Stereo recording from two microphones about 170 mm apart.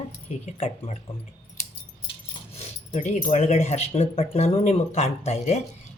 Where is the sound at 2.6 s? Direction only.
45° left (ahead or behind).